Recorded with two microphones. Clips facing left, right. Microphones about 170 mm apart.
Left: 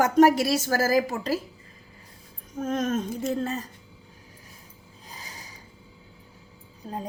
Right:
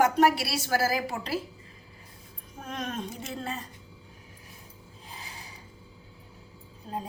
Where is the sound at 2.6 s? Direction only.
45° left (ahead or behind).